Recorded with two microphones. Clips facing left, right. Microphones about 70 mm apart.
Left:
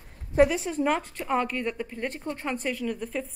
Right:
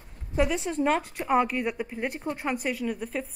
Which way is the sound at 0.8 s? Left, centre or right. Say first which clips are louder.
Right 2 dB; centre.